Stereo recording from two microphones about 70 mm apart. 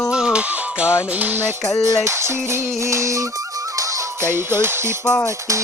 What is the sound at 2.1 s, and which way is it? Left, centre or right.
Music, right.